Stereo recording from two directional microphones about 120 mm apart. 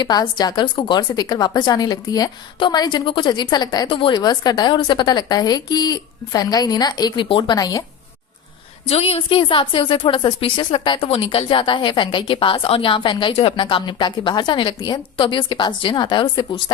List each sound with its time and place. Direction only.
0.0 s a woman's voice: 35° left (ahead or behind)
3.8 s a woman's voice: 45° left (ahead or behind); by 7.9 s 30° left (ahead or behind)
8.9 s a woman's voice: 55° left (ahead or behind); by 16.7 s 35° left (ahead or behind)